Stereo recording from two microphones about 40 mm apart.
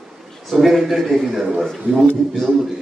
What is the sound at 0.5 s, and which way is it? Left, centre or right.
Speech, centre.